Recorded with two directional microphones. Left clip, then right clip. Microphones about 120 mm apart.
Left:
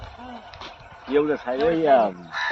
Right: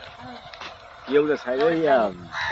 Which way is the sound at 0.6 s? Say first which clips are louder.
Right 1 dB; 40° right (ahead or behind).